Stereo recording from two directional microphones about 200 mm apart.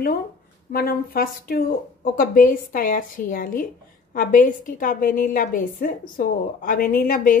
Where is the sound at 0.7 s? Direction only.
45° left (ahead or behind).